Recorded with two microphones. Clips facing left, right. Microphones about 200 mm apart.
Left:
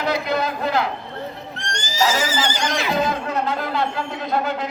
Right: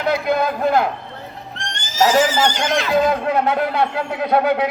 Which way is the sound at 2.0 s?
55° right (ahead or behind).